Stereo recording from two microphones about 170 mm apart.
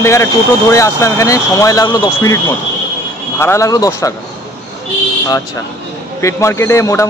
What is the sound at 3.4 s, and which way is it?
Speech, 15° left (ahead or behind).